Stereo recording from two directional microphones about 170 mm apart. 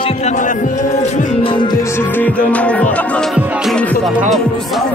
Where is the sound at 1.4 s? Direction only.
30° left (ahead or behind); by 3.4 s 5° left (ahead or behind).